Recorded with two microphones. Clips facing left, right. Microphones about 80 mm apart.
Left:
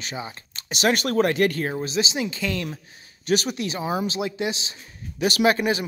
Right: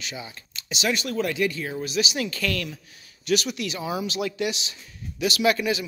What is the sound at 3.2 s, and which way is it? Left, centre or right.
Speech, left.